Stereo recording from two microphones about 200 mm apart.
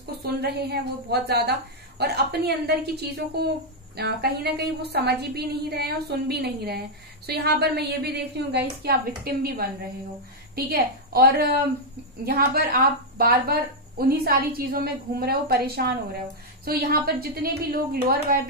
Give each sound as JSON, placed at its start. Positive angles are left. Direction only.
{"t": 0.2, "sound": "a woman's voice", "side_deg": -55}